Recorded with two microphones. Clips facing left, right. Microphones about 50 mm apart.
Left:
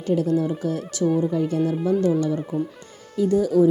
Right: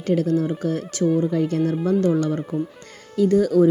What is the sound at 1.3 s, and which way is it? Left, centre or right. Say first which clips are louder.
Speech: right 1 dB; right.